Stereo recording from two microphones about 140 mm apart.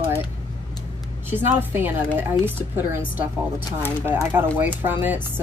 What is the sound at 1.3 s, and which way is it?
A woman's voice, 15° right (ahead or behind).